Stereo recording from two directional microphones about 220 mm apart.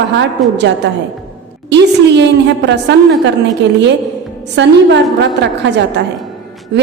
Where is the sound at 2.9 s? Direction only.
50° right (ahead or behind).